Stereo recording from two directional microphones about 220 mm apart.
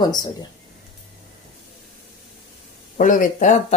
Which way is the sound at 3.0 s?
35° left (ahead or behind).